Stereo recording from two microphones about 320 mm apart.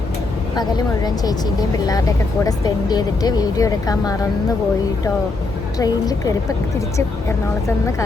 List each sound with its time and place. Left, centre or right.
0.5 s speech: centre
2.4 s speech: centre
5.7 s speech: centre